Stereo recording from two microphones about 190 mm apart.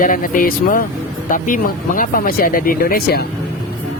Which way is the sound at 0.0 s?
45° left (ahead or behind).